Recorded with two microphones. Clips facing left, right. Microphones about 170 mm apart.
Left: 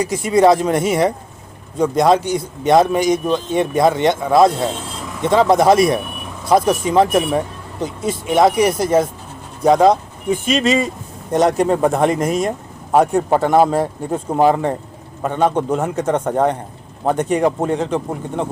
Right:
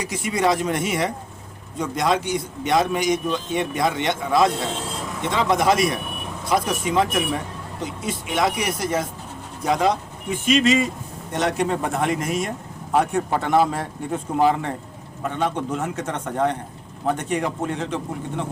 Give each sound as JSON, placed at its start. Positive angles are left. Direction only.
{"t": 0.0, "sound": "speech", "side_deg": 35}